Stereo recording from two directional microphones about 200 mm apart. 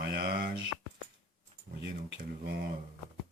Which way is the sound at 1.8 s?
60° right (ahead or behind).